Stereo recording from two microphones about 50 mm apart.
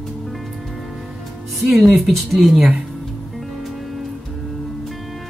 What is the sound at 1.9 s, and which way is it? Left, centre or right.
Speech, centre.